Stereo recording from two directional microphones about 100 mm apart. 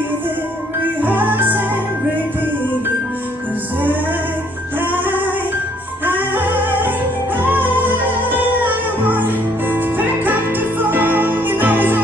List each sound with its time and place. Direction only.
1.0 s music: 20° right (ahead or behind)
4.7 s music: 20° right (ahead or behind)